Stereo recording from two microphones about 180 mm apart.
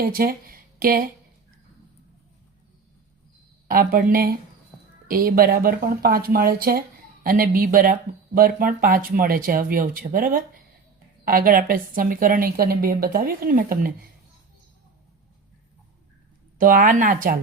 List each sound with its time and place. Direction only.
0.0 s speech: 55° right (ahead or behind)
3.7 s a woman's voice: 55° right (ahead or behind)
16.6 s a woman's voice: 50° right (ahead or behind)